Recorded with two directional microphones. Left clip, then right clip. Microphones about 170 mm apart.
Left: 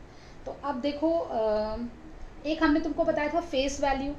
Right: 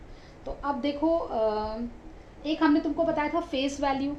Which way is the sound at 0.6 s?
45° right (ahead or behind).